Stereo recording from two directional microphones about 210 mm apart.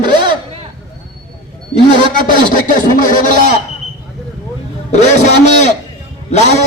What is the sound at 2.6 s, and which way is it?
Speech, 40° left (ahead or behind).